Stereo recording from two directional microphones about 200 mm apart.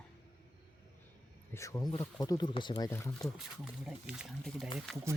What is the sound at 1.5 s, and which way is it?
Speech, 15° left (ahead or behind).